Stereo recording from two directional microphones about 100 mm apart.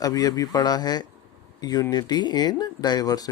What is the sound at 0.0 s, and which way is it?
Speech, 35° left (ahead or behind).